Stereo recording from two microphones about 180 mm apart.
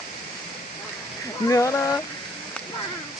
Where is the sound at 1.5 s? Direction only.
15° left (ahead or behind).